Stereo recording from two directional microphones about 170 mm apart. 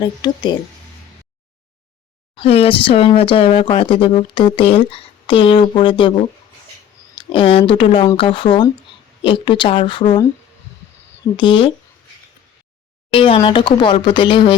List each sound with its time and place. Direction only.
0.0 s a woman's voice: 25° left (ahead or behind)
2.3 s speech: 35° left (ahead or behind)
7.2 s a woman's voice: 30° left (ahead or behind)
11.3 s a woman's voice: 30° left (ahead or behind)
13.1 s a woman's voice: 30° left (ahead or behind)